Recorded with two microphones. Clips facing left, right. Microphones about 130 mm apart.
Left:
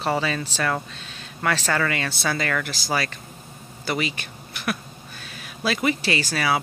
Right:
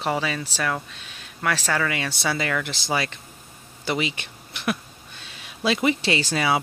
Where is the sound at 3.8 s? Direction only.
20° right (ahead or behind).